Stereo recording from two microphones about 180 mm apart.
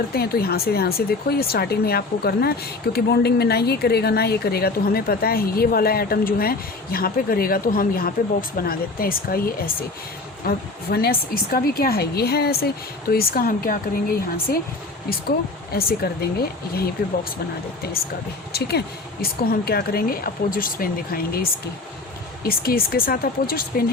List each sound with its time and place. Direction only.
0.1 s a woman's voice: 60° left (ahead or behind)
16.4 s a woman's voice: 60° left (ahead or behind)
22.4 s a woman's voice: 55° left (ahead or behind)